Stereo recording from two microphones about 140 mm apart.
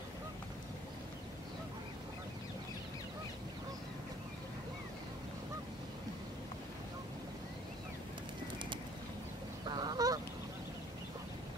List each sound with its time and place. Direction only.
9.7 s goose: 30° right (ahead or behind)